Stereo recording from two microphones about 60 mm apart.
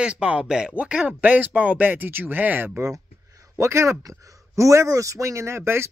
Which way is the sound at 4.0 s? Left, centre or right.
Right.